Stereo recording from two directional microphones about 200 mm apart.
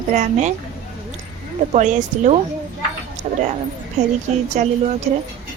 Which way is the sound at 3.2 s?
35° right (ahead or behind).